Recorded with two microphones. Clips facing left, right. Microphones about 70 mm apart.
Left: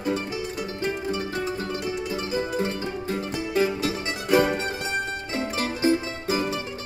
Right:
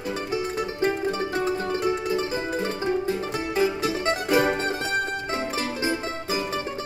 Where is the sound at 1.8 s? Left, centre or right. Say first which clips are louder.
Right 4 dB; right.